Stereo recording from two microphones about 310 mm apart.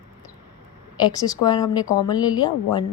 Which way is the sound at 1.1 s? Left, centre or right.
Centre.